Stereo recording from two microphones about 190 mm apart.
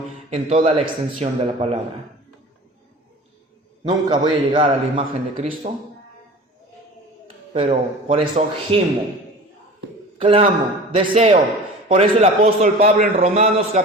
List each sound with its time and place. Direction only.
0.3 s a man's voice: 35° right (ahead or behind)
3.8 s a man's voice: 25° right (ahead or behind)
7.5 s a man's voice: 30° right (ahead or behind)
10.2 s a man's voice: 30° right (ahead or behind)